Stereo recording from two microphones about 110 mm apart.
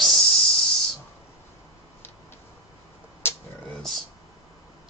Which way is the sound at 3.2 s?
20° left (ahead or behind).